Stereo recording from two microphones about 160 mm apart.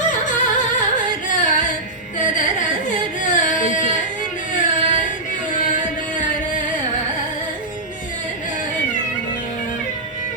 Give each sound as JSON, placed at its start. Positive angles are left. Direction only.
{"t": 0.1, "sound": "music", "side_deg": 50}
{"t": 2.1, "sound": "carnatic music", "side_deg": 50}
{"t": 4.5, "sound": "a sound", "side_deg": 50}
{"t": 5.6, "sound": "music", "side_deg": 50}